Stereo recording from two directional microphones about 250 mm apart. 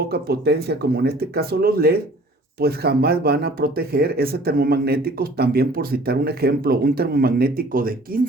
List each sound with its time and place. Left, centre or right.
0.1 s speech: right